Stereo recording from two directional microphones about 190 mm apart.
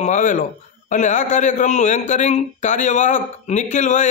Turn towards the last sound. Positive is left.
turn(degrees=40)  # may be behind; listen again after turning